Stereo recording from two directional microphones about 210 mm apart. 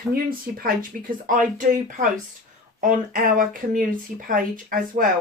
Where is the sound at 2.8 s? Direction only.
40° right (ahead or behind).